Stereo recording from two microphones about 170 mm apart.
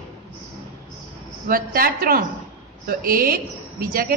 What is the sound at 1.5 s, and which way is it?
A woman's voice, 60° right (ahead or behind).